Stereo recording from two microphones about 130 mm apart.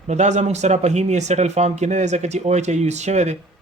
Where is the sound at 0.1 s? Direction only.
65° right (ahead or behind).